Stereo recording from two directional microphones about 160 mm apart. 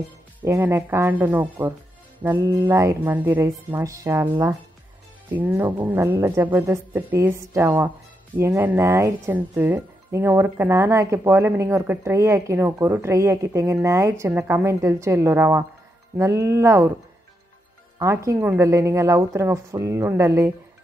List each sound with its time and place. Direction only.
0.4 s speech: 10° right (ahead or behind)
5.3 s speech: 10° right (ahead or behind)
17.9 s speech: 20° right (ahead or behind)